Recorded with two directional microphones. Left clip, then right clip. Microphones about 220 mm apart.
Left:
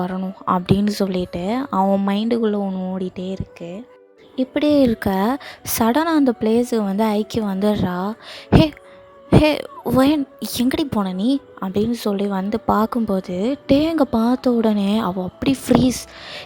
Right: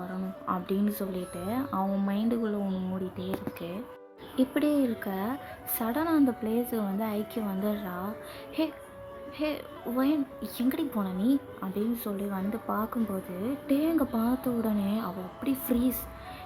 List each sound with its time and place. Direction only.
0.0 s a woman's voice: 45° left (ahead or behind)
9.3 s a woman's voice: 50° left (ahead or behind)